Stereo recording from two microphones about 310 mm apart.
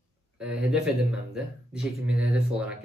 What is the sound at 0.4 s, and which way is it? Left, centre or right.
Speech, centre.